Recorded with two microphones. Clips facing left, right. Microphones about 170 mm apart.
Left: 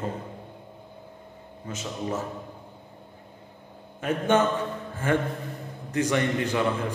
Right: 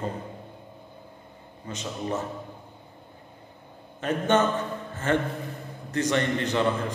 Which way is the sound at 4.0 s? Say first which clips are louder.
Even; 10° left (ahead or behind).